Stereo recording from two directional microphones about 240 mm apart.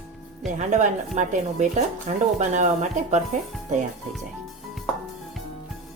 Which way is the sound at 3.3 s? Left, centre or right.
Right.